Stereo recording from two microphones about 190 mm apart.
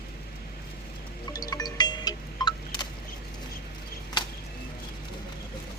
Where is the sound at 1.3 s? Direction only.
20° left (ahead or behind).